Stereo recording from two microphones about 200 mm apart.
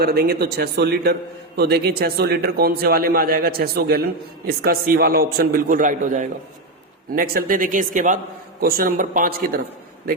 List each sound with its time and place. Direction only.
0.0 s a man's voice: 50° right (ahead or behind)